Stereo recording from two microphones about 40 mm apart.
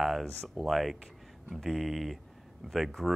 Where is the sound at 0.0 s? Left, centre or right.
Centre.